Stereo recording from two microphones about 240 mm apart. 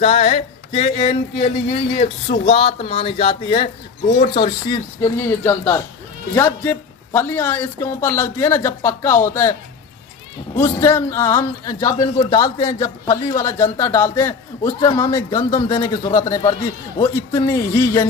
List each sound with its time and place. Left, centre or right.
0.0 s speech: left
5.0 s a man's voice: centre
10.6 s a man's voice: centre